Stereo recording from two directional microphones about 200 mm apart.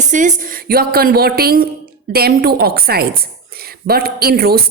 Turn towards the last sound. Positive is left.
turn(degrees=-50)  # may be behind; listen again after turning